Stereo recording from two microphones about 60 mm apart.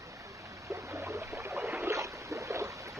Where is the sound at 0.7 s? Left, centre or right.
Right.